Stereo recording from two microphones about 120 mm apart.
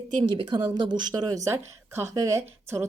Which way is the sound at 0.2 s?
40° right (ahead or behind).